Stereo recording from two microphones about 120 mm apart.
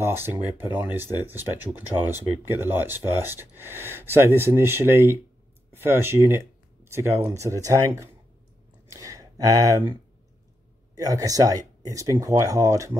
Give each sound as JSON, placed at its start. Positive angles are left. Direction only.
{"t": 0.0, "sound": "speech", "side_deg": -20}
{"t": 11.0, "sound": "speech", "side_deg": -30}